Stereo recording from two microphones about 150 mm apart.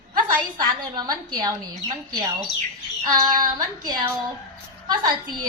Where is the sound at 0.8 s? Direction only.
25° right (ahead or behind).